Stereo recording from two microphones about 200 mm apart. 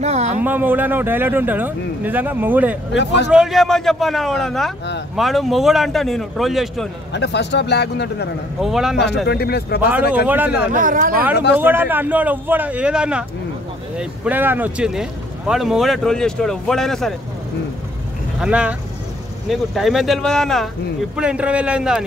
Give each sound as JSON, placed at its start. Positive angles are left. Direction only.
{"t": 0.0, "sound": "speech", "side_deg": -35}
{"t": 0.4, "sound": "speech", "side_deg": -10}
{"t": 3.0, "sound": "a man's voice", "side_deg": 60}
{"t": 3.3, "sound": "speech", "side_deg": -5}
{"t": 7.1, "sound": "a man's voice", "side_deg": 60}
{"t": 8.5, "sound": "speech", "side_deg": 0}
{"t": 8.9, "sound": "a man's voice", "side_deg": 55}
{"t": 9.8, "sound": "speech", "side_deg": -10}
{"t": 10.7, "sound": "speech", "side_deg": -40}
{"t": 11.5, "sound": "speech", "side_deg": -10}
{"t": 18.4, "sound": "speech", "side_deg": -5}